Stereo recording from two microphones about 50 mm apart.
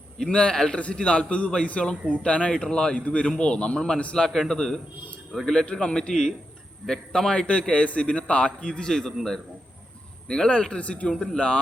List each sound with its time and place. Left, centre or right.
0.3 s a man's voice: centre
7.3 s a man's voice: left
10.2 s a man's voice: centre
11.1 s a man's voice: centre